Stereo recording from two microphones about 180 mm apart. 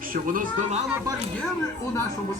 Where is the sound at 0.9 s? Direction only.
20° right (ahead or behind).